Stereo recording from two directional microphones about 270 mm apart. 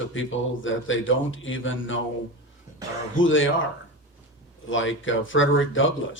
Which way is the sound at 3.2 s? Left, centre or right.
Left.